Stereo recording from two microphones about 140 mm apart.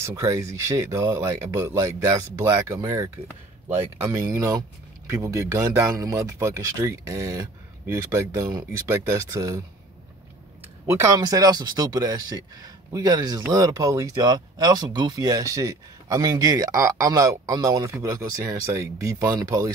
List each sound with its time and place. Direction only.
0.0 s speech: 20° right (ahead or behind)
2.4 s speech: 15° right (ahead or behind)
2.8 s speech: 30° right (ahead or behind)
3.6 s speech: 15° right (ahead or behind)
10.9 s speech: 20° right (ahead or behind)